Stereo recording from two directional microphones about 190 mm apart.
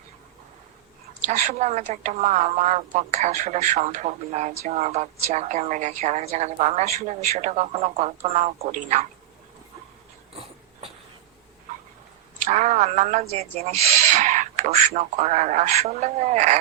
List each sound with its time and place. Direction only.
1.3 s a woman's voice: 40° right (ahead or behind)
10.3 s a sound: 30° right (ahead or behind)
12.5 s a woman's voice: 35° right (ahead or behind)